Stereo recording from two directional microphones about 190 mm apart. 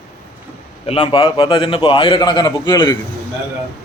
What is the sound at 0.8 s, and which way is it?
A man's voice, 30° left (ahead or behind).